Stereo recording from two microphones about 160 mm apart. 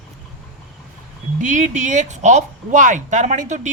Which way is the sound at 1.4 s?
50° right (ahead or behind).